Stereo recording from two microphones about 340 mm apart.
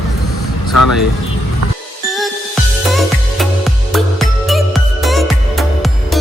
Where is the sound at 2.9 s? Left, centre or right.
Centre.